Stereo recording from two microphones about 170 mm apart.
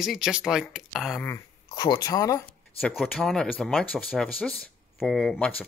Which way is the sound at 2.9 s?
Centre (ahead or behind).